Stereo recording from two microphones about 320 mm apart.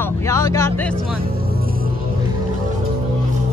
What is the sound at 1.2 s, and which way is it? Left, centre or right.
Speech, right.